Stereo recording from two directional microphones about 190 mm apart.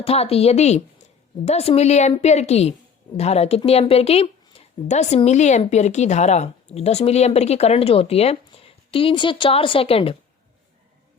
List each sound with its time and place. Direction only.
0.0 s a woman's voice: 30° left (ahead or behind)